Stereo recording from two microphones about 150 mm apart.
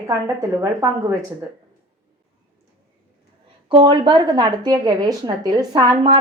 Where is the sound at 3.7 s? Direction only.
35° right (ahead or behind).